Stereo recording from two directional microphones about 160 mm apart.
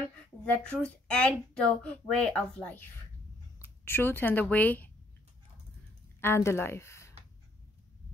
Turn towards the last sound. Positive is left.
turn(degrees=15)  # may be behind; listen again after turning